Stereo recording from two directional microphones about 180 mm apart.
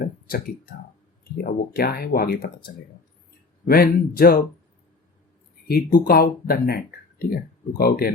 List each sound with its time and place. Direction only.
0.0 s a sound: 55° left (ahead or behind)
1.7 s speech: 55° left (ahead or behind)
5.6 s speech: 60° left (ahead or behind)